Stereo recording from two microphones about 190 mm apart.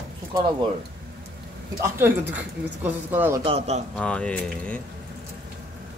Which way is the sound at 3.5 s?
35° right (ahead or behind).